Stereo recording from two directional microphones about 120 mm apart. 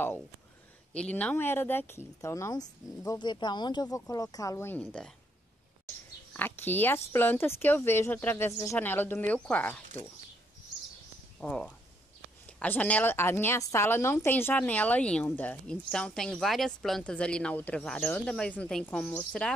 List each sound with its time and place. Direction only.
0.9 s speech: 10° left (ahead or behind)
6.3 s a woman's voice: 15° left (ahead or behind)
11.3 s a woman's voice: 5° left (ahead or behind)